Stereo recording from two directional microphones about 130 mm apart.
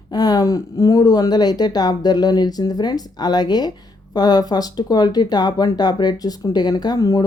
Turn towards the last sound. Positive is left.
turn(degrees=30)  # may be behind; listen again after turning